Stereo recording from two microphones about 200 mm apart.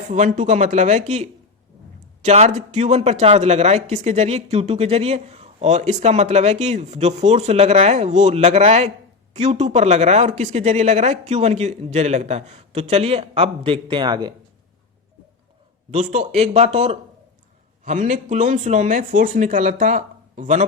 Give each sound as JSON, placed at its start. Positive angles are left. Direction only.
{"t": 0.1, "sound": "speech", "side_deg": -35}
{"t": 15.9, "sound": "speech", "side_deg": -35}